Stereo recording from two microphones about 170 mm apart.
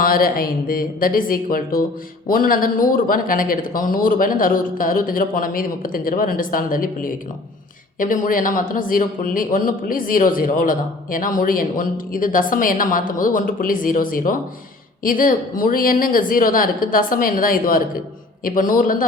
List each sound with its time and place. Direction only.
0.0 s a man's voice: 60° left (ahead or behind)